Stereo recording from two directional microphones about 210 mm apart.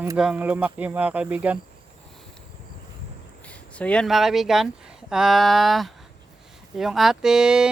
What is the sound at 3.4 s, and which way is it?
Speech, 5° left (ahead or behind).